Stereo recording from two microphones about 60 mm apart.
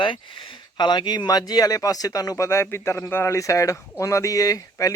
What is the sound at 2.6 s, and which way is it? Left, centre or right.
Speech, left.